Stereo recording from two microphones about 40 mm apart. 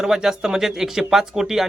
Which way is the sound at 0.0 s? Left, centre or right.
Centre.